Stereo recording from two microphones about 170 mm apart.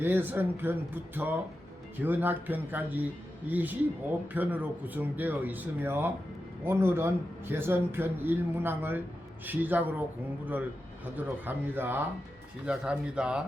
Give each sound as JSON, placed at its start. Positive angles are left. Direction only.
{"t": 0.0, "sound": "speech", "side_deg": -10}